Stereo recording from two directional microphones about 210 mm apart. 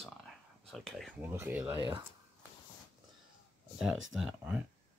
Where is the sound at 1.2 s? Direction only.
10° right (ahead or behind).